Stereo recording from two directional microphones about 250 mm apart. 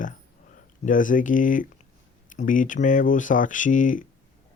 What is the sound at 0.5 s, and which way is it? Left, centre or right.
Speech, left.